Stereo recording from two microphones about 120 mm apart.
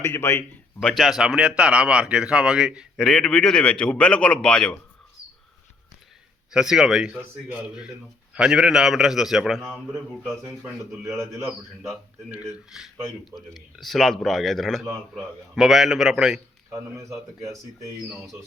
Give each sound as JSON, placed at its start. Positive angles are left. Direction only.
{"t": 0.0, "sound": "a man's voice", "side_deg": 20}
{"t": 0.8, "sound": "a man's voice", "side_deg": 5}
{"t": 6.5, "sound": "a man's voice", "side_deg": -5}
{"t": 11.2, "sound": "speech", "side_deg": -25}
{"t": 11.9, "sound": "a man's voice", "side_deg": -10}
{"t": 16.6, "sound": "speech", "side_deg": -25}